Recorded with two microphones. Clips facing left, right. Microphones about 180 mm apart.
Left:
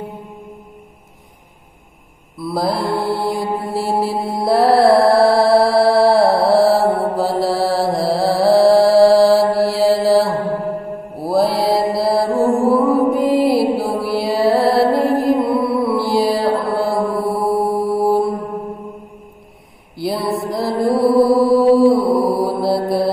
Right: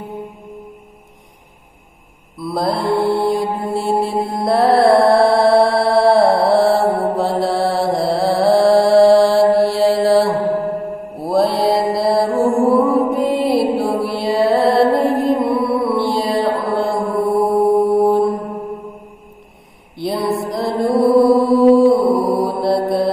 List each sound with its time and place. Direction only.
2.3 s mantra: centre (ahead or behind)
17.7 s mantra: 20° right (ahead or behind)
18.0 s mantra: 5° left (ahead or behind)
20.0 s music: centre (ahead or behind)
22.0 s mantra: centre (ahead or behind)